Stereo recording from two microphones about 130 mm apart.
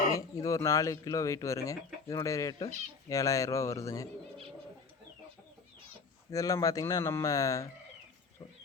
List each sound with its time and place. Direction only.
0.1 s speech: 25° left (ahead or behind)
6.3 s speech: 25° left (ahead or behind)